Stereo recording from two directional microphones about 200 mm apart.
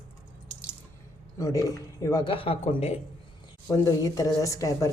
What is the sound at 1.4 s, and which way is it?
Speech, 15° left (ahead or behind).